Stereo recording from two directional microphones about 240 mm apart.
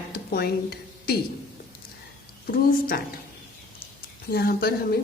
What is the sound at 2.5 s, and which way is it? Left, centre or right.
Speech, left.